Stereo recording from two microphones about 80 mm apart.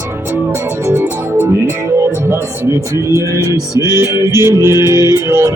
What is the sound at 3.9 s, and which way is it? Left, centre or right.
Music, right.